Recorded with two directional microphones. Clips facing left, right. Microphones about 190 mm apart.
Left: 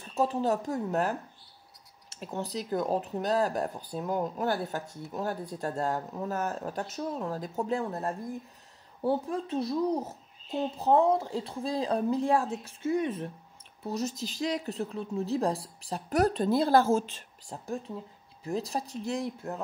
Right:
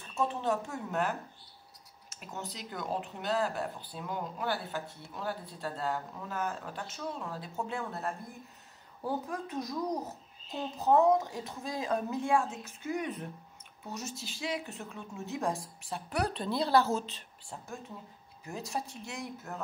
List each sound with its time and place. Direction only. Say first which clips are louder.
0.0 s a woman's voice: left 5 dB; 35° left (ahead or behind)
13.8 s a woman's voice: left 8 dB; 35° left (ahead or behind)